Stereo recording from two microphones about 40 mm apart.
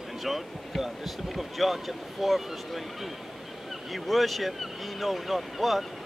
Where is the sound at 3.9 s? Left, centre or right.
Centre.